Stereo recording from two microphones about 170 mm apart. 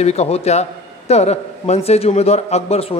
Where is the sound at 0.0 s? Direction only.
40° left (ahead or behind).